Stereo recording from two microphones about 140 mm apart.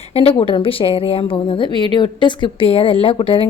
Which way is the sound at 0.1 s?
45° left (ahead or behind).